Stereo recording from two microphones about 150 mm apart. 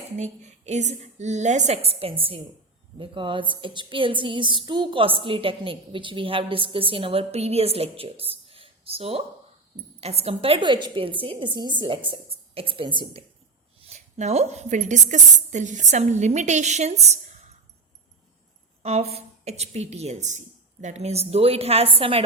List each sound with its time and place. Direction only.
0.2 s a woman's voice: 50° right (ahead or behind); by 13.2 s 35° right (ahead or behind)
13.8 s a woman's voice: 45° right (ahead or behind)
18.8 s a woman's voice: 45° right (ahead or behind)